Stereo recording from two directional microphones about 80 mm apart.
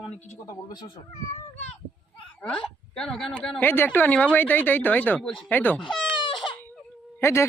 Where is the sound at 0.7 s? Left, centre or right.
Left.